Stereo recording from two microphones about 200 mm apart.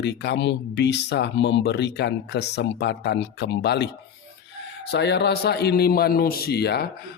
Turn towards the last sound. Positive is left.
turn(degrees=55)  # may be behind; listen again after turning